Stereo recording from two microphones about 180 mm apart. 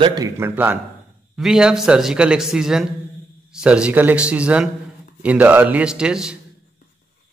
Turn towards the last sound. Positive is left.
turn(degrees=-5)  # may be behind; listen again after turning